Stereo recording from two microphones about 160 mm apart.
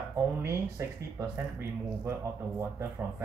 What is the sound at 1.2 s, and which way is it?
Speech, 15° right (ahead or behind).